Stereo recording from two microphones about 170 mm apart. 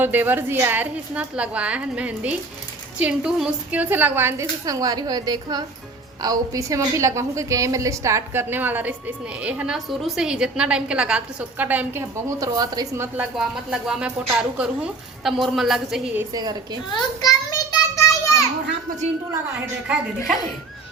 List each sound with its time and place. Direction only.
0.0 s a woman's voice: 10° right (ahead or behind)
12.4 s a woman's voice: 20° right (ahead or behind)
13.3 s speech: 5° right (ahead or behind)
16.3 s a woman's voice: 25° right (ahead or behind)
16.9 s a sound: 25° left (ahead or behind)
19.3 s a woman's voice: 10° right (ahead or behind)